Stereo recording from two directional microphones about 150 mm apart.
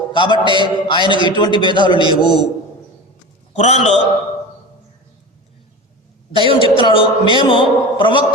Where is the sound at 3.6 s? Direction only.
50° left (ahead or behind).